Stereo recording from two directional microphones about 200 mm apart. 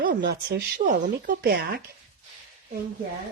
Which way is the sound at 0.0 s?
50° right (ahead or behind).